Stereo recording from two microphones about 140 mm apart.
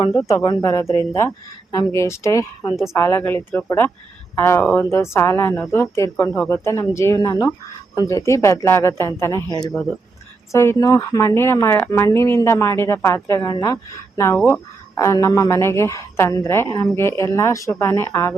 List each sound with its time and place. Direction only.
0.4 s speech: 20° left (ahead or behind)